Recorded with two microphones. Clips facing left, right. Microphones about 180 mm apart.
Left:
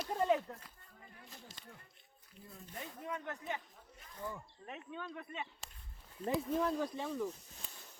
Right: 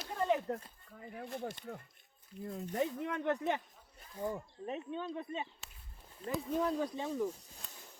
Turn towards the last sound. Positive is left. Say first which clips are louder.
# right 2 dB
turn(degrees=-10)  # may be behind; listen again after turning